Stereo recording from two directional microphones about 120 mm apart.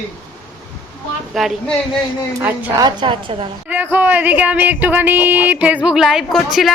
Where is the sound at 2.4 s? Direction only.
15° right (ahead or behind).